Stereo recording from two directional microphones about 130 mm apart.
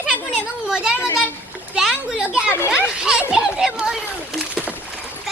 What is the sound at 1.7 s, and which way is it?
Speech, 5° right (ahead or behind).